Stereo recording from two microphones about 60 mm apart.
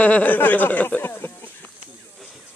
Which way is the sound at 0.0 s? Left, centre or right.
Left.